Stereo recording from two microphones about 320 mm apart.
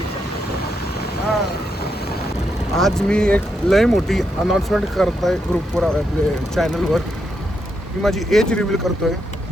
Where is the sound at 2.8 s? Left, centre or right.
Centre.